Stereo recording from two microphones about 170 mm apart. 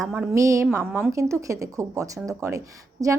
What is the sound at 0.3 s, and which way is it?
A woman's voice, 20° right (ahead or behind).